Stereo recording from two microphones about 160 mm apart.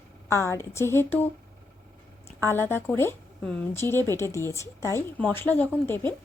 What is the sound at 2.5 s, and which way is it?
Speech, 15° left (ahead or behind).